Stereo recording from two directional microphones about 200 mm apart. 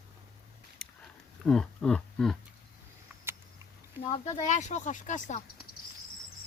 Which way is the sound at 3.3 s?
10° right (ahead or behind).